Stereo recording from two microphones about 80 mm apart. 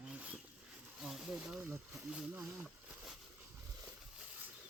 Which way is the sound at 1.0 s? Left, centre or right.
Centre.